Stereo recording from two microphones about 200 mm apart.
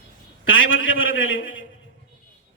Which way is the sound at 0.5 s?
80° left.